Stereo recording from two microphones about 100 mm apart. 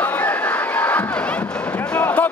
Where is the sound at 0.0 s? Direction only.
15° left (ahead or behind).